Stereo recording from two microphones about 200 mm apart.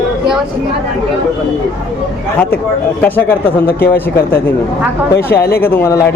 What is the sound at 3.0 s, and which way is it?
Speech, 10° left (ahead or behind).